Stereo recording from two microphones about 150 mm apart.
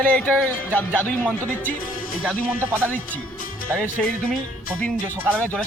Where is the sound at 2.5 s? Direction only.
10° right (ahead or behind).